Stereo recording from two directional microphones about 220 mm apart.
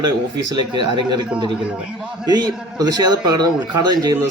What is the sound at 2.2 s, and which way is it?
A man's voice, 15° right (ahead or behind).